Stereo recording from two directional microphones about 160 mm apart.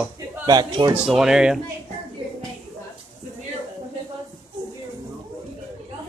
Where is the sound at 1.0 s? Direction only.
5° right (ahead or behind).